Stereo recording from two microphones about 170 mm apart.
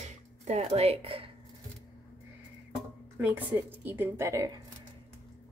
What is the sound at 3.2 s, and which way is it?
A woman's voice, 10° right (ahead or behind).